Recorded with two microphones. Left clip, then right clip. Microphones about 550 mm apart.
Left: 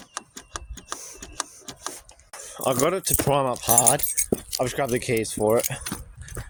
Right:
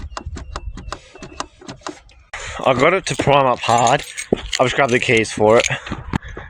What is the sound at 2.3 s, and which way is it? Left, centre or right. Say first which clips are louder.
Speech: right 9 dB; left.